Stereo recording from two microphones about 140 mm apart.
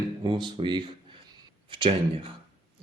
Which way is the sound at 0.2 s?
35° right (ahead or behind).